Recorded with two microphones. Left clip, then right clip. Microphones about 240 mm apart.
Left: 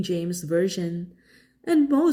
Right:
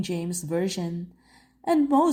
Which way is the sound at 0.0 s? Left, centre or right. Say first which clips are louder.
Left 3 dB; centre.